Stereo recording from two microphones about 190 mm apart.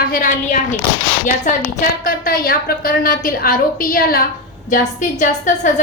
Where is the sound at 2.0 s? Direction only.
50° left (ahead or behind).